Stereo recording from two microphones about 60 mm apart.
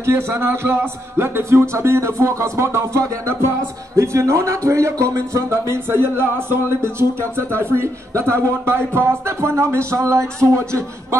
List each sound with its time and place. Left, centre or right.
0.0 s a man's voice: right